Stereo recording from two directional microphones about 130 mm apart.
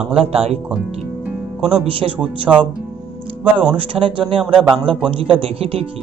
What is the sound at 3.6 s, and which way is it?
Speech, 45° right (ahead or behind).